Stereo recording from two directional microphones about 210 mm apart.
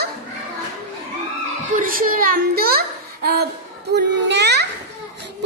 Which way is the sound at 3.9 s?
55° right (ahead or behind).